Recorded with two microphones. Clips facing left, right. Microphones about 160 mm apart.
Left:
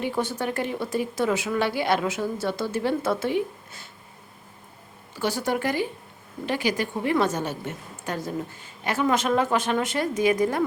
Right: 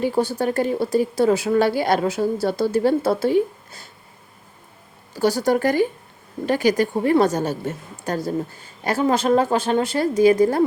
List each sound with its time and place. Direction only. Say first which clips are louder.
0.0 s a woman's voice: right 6 dB; 35° right (ahead or behind)
5.1 s a woman's voice: right 7 dB; 40° right (ahead or behind)